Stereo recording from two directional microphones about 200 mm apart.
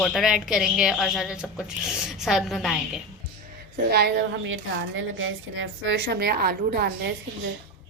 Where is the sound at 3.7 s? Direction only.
55° right (ahead or behind).